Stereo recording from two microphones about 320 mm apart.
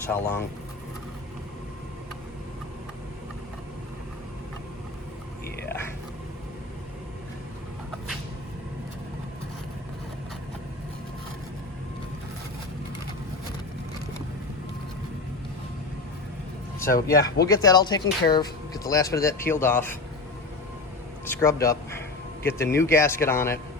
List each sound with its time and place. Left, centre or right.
0.1 s speech: centre
16.8 s speech: left
17.5 s speech: centre
21.2 s speech: centre